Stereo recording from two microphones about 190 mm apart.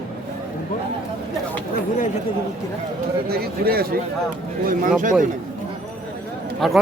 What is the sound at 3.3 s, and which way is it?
Speech, 55° right (ahead or behind).